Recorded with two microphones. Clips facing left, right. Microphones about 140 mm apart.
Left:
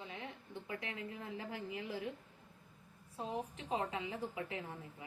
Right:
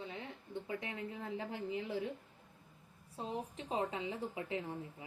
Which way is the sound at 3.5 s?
30° right (ahead or behind).